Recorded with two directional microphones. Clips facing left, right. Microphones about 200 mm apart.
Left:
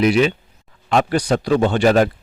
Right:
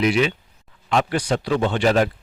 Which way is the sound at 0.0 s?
40° left (ahead or behind).